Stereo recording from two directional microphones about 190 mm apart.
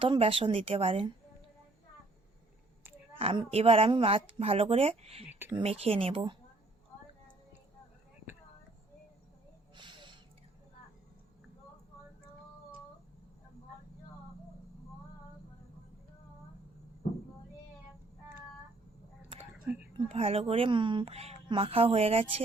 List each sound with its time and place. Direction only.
0.0 s speech: 30° right (ahead or behind)
3.2 s a woman's voice: 30° right (ahead or behind)
9.7 s a sound: 25° right (ahead or behind)
19.7 s whispering: 10° right (ahead or behind)
20.1 s speech: 30° right (ahead or behind)